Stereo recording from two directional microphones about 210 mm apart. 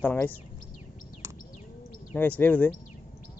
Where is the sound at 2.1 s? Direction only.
10° left (ahead or behind).